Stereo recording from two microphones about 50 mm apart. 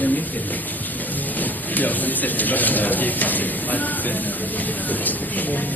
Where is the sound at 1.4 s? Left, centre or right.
Left.